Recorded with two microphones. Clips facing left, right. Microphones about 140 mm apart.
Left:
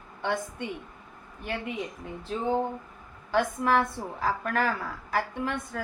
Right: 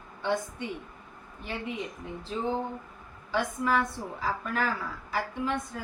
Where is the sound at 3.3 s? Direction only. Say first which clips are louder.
Left 3 dB; 55° left (ahead or behind).